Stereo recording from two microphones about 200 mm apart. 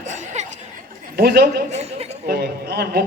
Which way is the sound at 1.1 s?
50° right (ahead or behind).